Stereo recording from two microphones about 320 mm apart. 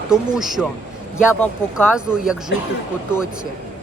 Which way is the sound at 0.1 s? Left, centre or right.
Centre.